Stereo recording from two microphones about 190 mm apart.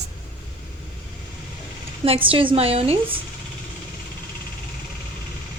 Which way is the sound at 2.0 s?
30° right (ahead or behind).